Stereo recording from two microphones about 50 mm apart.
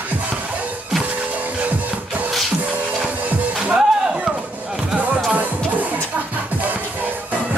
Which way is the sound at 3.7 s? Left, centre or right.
Centre.